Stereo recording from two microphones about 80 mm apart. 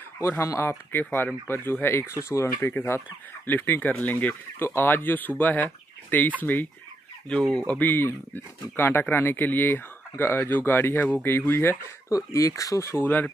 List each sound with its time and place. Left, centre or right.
0.2 s speech: left
7.2 s speech: centre; by 11.7 s left
12.1 s speech: left
13.0 s speech: left